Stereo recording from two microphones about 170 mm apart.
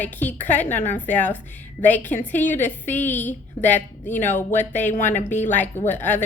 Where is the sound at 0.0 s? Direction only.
10° left (ahead or behind).